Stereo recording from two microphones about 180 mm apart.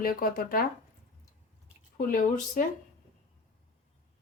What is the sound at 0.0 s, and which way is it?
Speech, 55° left (ahead or behind).